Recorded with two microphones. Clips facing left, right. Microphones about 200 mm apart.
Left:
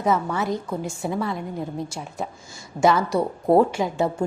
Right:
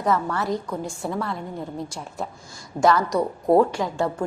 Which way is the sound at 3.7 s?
20° left (ahead or behind).